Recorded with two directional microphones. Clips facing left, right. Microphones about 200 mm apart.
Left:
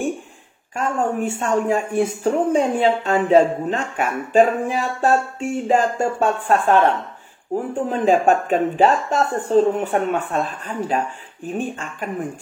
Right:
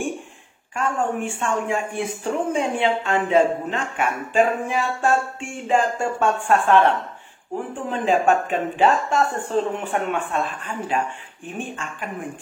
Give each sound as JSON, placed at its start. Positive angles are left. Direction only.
{"t": 0.7, "sound": "speech", "side_deg": 40}